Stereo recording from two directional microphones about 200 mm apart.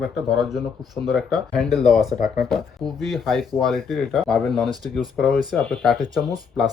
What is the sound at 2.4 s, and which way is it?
Speech, centre (ahead or behind).